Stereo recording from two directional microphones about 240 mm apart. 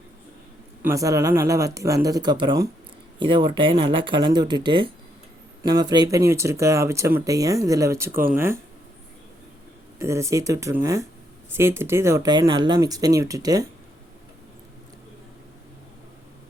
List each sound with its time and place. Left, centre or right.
0.8 s speech: centre
10.0 s speech: centre